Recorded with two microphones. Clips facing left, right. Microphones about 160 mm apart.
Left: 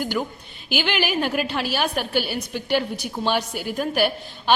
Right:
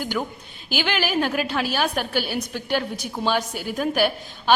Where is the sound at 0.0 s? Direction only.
Centre (ahead or behind).